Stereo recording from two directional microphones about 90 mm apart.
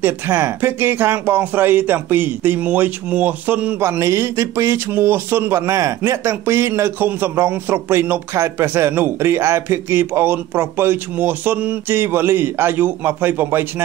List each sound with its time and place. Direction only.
0.0 s a man's voice: 25° right (ahead or behind)
3.8 s a man's voice: 30° right (ahead or behind)